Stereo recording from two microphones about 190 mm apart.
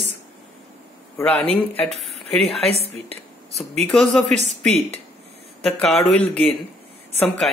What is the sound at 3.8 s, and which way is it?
Speech, 5° left (ahead or behind).